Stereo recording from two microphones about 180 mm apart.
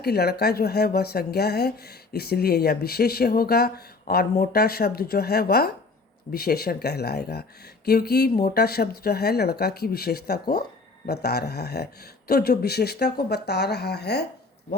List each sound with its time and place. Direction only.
0.0 s speech: 60° left (ahead or behind)